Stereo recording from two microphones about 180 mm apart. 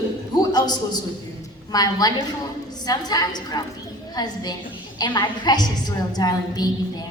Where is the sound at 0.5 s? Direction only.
20° left (ahead or behind).